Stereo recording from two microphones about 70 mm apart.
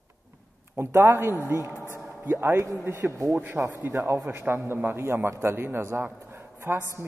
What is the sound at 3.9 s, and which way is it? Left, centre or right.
A man's voice, right.